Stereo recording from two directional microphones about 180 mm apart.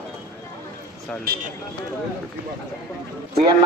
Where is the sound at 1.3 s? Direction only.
60° right (ahead or behind).